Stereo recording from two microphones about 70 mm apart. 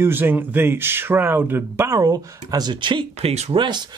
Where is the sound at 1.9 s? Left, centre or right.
Right.